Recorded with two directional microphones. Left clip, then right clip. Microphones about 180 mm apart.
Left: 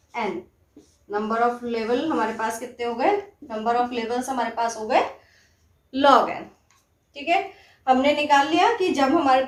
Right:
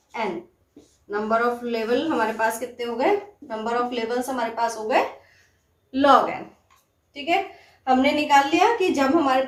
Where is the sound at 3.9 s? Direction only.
25° left (ahead or behind).